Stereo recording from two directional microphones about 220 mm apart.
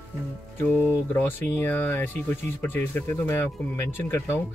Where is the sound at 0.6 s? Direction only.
10° left (ahead or behind).